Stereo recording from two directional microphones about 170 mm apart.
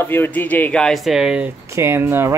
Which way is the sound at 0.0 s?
10° left (ahead or behind).